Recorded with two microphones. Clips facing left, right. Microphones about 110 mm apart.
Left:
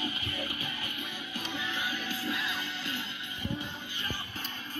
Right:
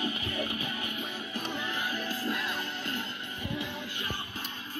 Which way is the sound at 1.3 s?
45° right (ahead or behind).